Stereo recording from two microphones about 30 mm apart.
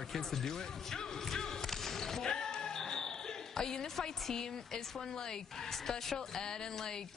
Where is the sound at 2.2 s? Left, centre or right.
Left.